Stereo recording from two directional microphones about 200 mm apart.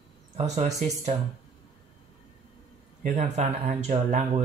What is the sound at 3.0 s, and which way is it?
Speech, 40° right (ahead or behind).